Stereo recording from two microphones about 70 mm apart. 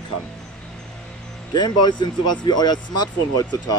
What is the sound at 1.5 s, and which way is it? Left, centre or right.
Speech, left.